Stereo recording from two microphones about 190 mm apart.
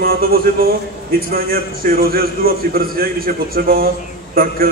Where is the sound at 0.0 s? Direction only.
50° right (ahead or behind).